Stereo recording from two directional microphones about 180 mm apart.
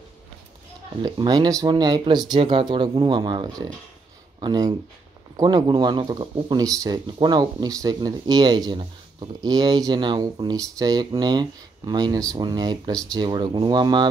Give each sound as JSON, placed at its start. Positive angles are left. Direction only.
{"t": 1.0, "sound": "speech", "side_deg": -25}